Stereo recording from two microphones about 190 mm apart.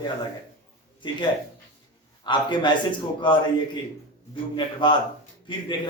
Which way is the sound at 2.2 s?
25° left (ahead or behind).